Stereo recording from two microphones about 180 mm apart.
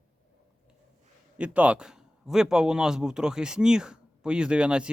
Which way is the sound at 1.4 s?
5° right (ahead or behind).